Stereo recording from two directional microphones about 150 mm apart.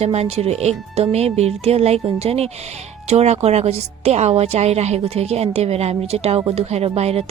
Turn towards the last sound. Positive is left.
turn(degrees=-45)  # may be behind; listen again after turning